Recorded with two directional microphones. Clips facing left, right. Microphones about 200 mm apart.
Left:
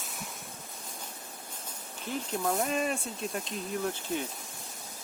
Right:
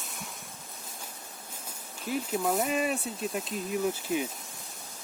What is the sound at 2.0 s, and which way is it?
Speech, 5° right (ahead or behind).